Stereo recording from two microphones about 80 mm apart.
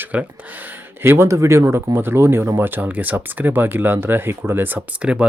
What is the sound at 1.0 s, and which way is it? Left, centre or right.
Speech, right.